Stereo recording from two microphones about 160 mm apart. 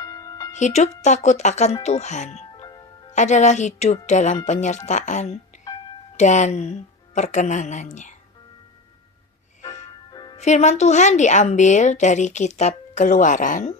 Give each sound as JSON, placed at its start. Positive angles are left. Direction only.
{"t": 0.0, "sound": "music", "side_deg": 20}
{"t": 0.5, "sound": "a woman's voice", "side_deg": 45}
{"t": 10.3, "sound": "a woman's voice", "side_deg": 45}